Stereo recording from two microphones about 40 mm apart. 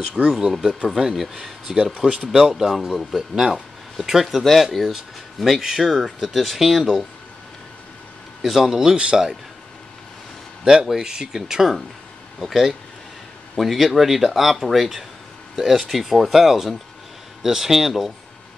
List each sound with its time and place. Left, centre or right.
0.3 s speech: centre
8.4 s speech: centre
10.6 s speech: centre